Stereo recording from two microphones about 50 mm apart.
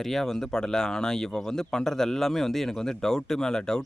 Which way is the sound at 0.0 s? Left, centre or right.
Centre.